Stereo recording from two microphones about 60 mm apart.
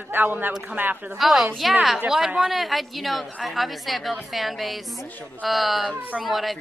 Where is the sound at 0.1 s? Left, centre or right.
Right.